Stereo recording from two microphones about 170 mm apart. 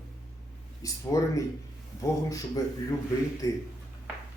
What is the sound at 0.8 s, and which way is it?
Speech, 20° left (ahead or behind).